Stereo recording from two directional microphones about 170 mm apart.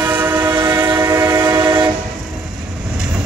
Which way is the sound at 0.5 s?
25° right (ahead or behind).